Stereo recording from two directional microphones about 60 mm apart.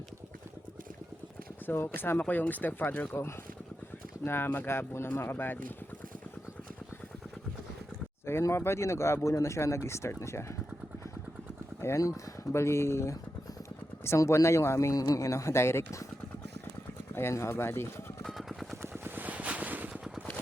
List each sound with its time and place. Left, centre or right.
1.6 s speech: left
2.1 s speech: left
3.1 s speech: left
8.3 s speech: left
11.9 s speech: left
14.2 s speech: left
14.9 s speech: left
17.2 s speech: left
18.2 s vehicle: centre
18.8 s vehicle: right
19.9 s a sound: centre